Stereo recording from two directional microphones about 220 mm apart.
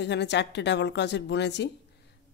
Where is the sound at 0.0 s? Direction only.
50° left (ahead or behind).